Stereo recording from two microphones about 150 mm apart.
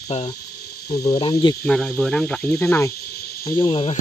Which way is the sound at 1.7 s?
5° left (ahead or behind).